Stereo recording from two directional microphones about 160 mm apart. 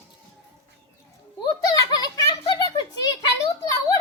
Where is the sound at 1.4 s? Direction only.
25° left (ahead or behind).